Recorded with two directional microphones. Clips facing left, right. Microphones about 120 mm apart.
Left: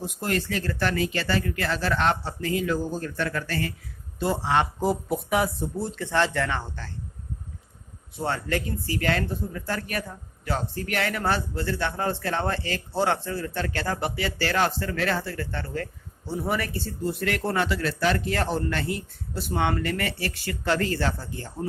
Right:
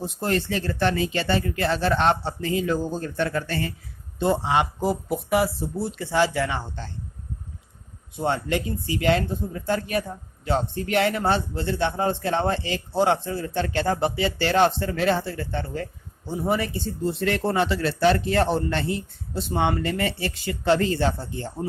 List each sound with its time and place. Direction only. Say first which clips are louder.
0.0 s a man's voice: right 3 dB; 30° right (ahead or behind)
4.8 s speech: even; centre (ahead or behind)
8.2 s a man's voice: right 3 dB; 20° right (ahead or behind)